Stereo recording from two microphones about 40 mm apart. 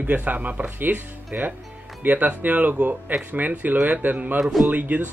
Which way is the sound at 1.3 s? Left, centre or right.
Right.